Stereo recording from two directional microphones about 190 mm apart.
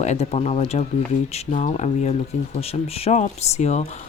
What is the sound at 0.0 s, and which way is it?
Speech, 35° left (ahead or behind).